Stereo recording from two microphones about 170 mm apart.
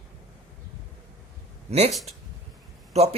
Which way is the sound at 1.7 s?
40° right (ahead or behind).